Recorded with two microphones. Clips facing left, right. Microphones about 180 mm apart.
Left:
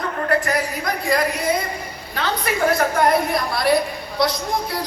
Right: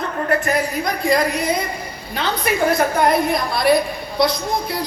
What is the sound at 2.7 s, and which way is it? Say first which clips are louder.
A woman's voice: even; 15° right (ahead or behind).